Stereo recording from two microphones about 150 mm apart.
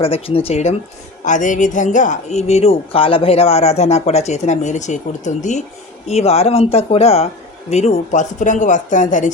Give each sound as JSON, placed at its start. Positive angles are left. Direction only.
{"t": 0.0, "sound": "speech", "side_deg": 40}
{"t": 1.2, "sound": "speech", "side_deg": 55}